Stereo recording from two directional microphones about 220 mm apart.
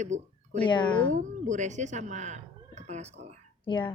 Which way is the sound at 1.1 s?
35° right (ahead or behind).